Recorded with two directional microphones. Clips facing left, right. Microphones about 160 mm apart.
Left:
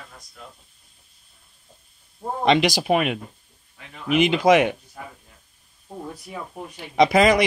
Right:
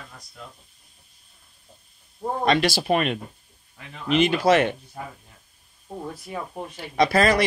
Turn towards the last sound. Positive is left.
turn(degrees=15)  # may be behind; listen again after turning